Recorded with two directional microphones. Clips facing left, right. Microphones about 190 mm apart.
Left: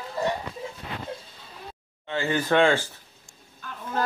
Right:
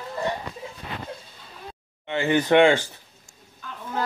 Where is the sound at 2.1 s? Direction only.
20° right (ahead or behind).